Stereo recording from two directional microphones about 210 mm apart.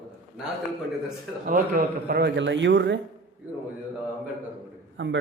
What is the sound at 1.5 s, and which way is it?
A man's voice, 45° right (ahead or behind).